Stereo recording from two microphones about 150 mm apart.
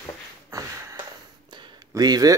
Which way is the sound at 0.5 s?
20° right (ahead or behind).